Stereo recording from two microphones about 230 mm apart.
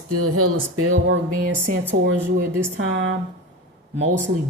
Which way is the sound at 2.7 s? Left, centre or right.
Right.